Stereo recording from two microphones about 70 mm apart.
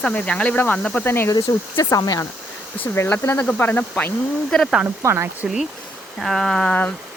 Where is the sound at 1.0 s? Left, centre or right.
Left.